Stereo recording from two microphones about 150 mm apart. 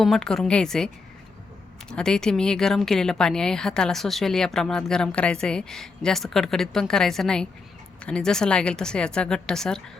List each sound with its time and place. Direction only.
0.0 s a woman's voice: 5° left (ahead or behind)
1.9 s a woman's voice: 5° left (ahead or behind)